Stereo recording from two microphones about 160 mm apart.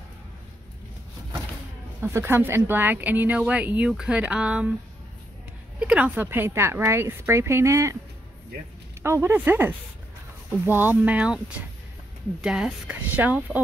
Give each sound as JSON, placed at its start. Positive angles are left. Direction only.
{"t": 2.0, "sound": "speech", "side_deg": -15}
{"t": 5.8, "sound": "speech", "side_deg": -10}
{"t": 9.0, "sound": "speech", "side_deg": -15}